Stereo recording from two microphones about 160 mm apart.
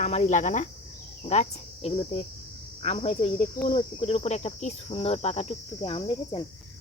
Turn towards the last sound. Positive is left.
turn(degrees=30)  # may be behind; listen again after turning